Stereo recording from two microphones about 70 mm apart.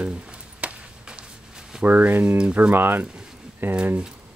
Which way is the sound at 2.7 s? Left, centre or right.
Right.